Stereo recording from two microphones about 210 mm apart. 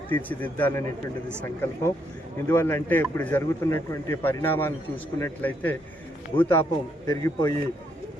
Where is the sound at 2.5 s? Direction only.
10° left (ahead or behind).